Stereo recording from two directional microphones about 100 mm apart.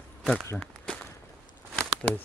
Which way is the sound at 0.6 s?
10° left (ahead or behind).